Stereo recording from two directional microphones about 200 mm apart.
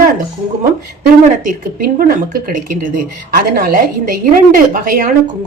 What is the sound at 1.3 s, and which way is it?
Speech, 45° right (ahead or behind).